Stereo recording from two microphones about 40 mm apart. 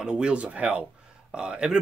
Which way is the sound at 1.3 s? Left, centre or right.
Right.